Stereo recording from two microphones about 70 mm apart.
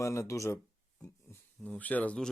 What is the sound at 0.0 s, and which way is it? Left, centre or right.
Speech, left.